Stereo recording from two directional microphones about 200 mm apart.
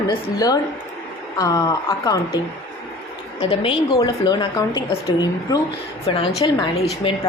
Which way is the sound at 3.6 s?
25° left (ahead or behind).